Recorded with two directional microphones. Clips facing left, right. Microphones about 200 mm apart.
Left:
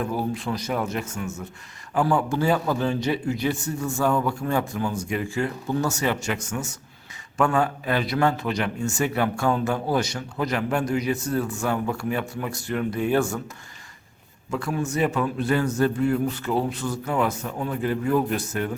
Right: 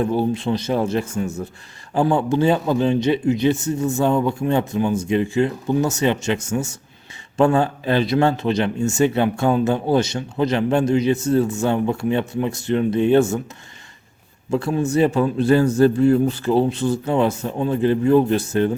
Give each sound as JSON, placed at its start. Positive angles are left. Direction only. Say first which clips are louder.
{"t": 0.0, "sound": "a man's voice", "louder": "right 7 dB", "side_deg": -25}
{"t": 14.5, "sound": "a man's voice", "louder": "right 7 dB", "side_deg": -30}